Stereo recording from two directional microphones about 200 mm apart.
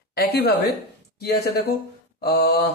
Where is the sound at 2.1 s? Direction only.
55° left (ahead or behind).